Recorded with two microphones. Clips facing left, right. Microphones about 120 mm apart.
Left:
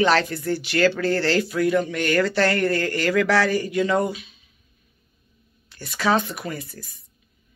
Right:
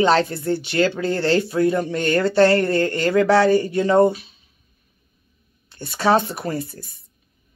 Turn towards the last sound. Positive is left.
turn(degrees=-30)  # may be behind; listen again after turning